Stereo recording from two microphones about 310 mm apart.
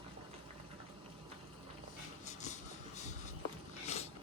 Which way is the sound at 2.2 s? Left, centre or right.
Left.